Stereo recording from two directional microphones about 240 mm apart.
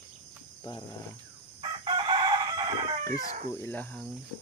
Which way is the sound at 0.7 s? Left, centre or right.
Centre.